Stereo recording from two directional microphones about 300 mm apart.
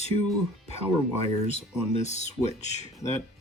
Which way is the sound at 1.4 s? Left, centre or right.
Left.